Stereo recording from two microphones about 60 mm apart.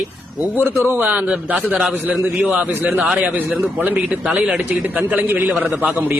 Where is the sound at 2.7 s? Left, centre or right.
Right.